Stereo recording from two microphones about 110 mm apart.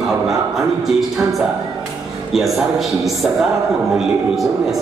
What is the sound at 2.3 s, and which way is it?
A man's voice, centre (ahead or behind).